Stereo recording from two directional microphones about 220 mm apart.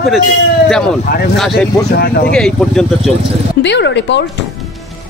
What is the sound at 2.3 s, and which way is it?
Speech, 5° left (ahead or behind).